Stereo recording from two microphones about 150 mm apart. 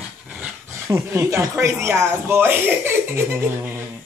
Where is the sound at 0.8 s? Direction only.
20° right (ahead or behind).